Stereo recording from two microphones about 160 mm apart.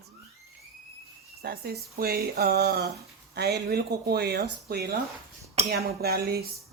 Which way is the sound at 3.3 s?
90° right.